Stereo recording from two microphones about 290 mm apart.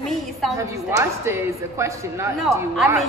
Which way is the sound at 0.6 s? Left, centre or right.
Centre.